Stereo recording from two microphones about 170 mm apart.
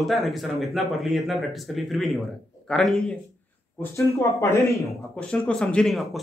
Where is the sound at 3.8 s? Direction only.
15° left (ahead or behind).